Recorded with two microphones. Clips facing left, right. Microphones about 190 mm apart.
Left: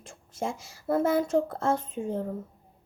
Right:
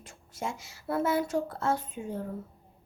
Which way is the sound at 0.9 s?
50° left (ahead or behind).